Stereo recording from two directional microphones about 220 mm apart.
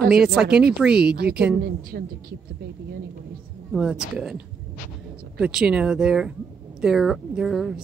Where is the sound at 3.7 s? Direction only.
5° right (ahead or behind).